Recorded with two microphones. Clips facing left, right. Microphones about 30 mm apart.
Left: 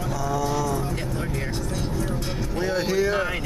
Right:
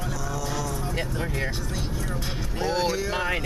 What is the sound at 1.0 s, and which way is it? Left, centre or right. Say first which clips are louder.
Music: even; centre.